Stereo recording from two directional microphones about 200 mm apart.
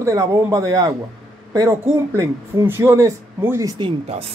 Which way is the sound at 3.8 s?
30° right (ahead or behind).